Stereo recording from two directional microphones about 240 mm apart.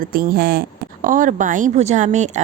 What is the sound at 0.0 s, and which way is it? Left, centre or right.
A woman's voice, right.